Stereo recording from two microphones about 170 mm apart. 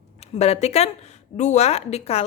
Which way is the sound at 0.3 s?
40° left (ahead or behind).